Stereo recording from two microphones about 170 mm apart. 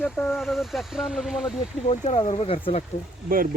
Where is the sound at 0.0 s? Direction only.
10° left (ahead or behind).